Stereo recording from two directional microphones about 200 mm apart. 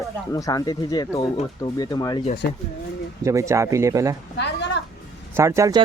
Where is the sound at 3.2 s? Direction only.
15° right (ahead or behind).